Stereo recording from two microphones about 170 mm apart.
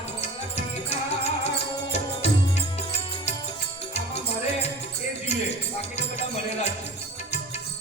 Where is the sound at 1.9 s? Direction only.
40° left (ahead or behind).